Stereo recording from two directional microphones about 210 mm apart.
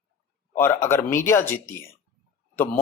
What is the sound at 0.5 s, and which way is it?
Speech, 10° left (ahead or behind).